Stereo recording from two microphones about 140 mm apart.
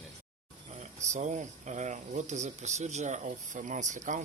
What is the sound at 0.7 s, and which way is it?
Speech, 55° right (ahead or behind).